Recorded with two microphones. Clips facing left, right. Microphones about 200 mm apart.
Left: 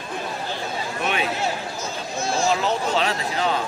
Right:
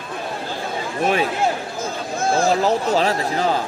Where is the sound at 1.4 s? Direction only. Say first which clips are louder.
Right 5 dB; 55° right (ahead or behind).